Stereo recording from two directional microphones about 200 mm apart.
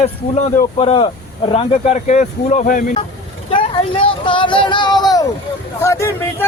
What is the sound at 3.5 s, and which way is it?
Speech, 25° left (ahead or behind).